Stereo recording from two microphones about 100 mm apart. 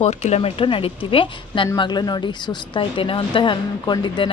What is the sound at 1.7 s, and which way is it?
Speech, 50° left (ahead or behind).